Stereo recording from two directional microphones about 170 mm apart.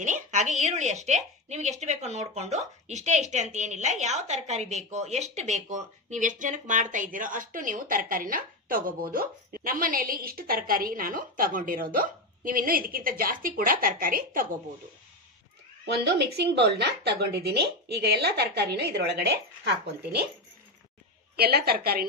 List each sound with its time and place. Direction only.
0.0 s a woman's voice: 45° right (ahead or behind)
15.8 s speech: 75° right (ahead or behind)
21.4 s a woman's voice: 65° right (ahead or behind)